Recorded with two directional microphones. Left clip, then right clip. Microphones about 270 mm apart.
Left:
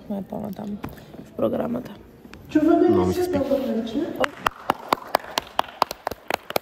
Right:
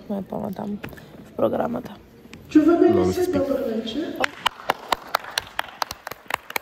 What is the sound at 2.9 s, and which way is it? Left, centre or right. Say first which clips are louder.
Speech: right 1 dB; centre.